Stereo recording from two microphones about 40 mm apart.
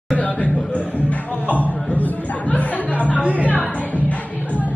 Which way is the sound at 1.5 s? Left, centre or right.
Left.